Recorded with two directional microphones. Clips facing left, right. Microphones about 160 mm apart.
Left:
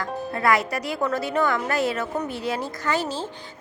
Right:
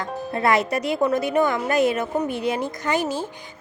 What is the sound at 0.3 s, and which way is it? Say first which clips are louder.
Speech: right 2 dB; 25° right (ahead or behind).